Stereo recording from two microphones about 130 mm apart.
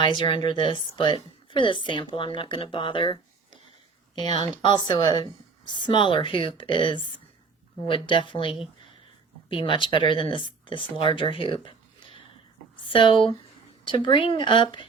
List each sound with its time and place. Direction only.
0.0 s a woman's voice: 35° left (ahead or behind)
12.9 s a woman's voice: 40° left (ahead or behind)